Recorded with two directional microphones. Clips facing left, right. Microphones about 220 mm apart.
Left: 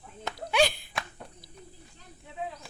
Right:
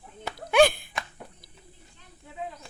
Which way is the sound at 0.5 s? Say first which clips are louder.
Right 6 dB; 55° right (ahead or behind).